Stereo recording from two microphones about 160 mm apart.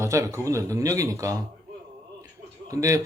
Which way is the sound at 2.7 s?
20° right (ahead or behind).